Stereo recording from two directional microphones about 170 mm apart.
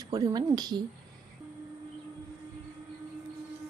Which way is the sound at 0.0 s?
20° right (ahead or behind).